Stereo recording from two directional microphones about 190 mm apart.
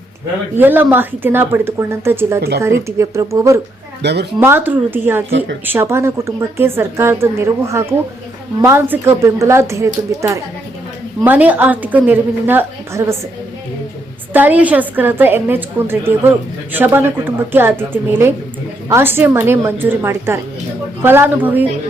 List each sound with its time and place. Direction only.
0.5 s a woman's voice: 10° right (ahead or behind)
4.0 s speech: 60° right (ahead or behind)
4.4 s a woman's voice: 10° right (ahead or behind)
14.3 s a woman's voice: 10° right (ahead or behind)